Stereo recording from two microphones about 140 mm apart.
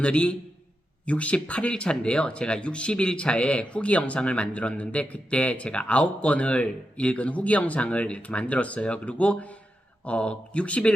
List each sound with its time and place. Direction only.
0.0 s speech: 10° left (ahead or behind)